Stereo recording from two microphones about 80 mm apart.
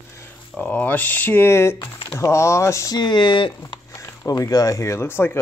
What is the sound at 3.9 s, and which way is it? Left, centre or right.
Speech, left.